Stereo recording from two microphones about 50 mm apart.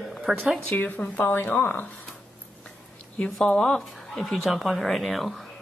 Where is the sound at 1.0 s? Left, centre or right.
Left.